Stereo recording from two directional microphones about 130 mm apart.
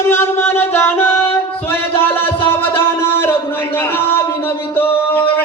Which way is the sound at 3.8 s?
15° left (ahead or behind).